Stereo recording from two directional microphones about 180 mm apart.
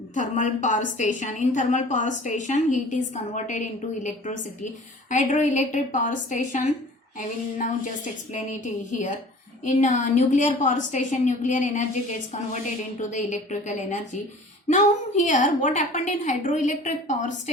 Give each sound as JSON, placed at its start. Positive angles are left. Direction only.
{"t": 0.1, "sound": "a woman's voice", "side_deg": 45}